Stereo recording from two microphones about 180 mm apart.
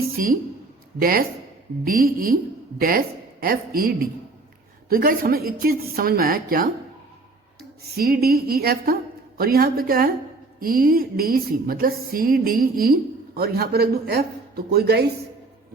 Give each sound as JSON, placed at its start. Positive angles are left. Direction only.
{"t": 0.2, "sound": "a woman's voice", "side_deg": -50}
{"t": 3.4, "sound": "a woman's voice", "side_deg": -55}
{"t": 7.9, "sound": "a woman's voice", "side_deg": -55}